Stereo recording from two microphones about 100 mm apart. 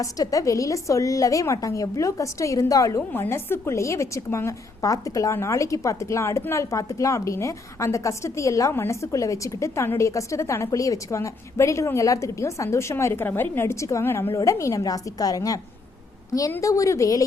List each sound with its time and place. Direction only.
0.0 s a woman's voice: 35° left (ahead or behind)
3.1 s a woman's voice: 25° left (ahead or behind)